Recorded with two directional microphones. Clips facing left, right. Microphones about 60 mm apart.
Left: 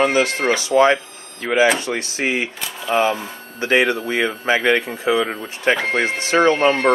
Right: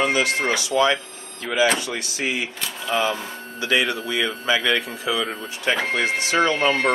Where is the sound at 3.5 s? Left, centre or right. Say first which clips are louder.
Left 5 dB; left.